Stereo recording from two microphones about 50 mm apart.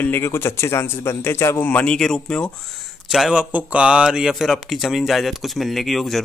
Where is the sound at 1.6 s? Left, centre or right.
Left.